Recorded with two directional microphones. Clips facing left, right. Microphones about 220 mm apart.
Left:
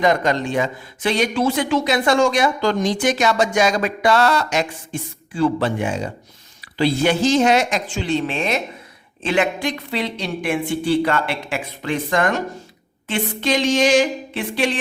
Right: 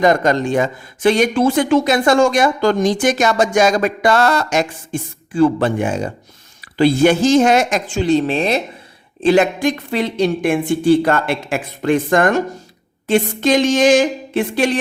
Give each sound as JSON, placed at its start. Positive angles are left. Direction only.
{"t": 0.0, "sound": "speech", "side_deg": -45}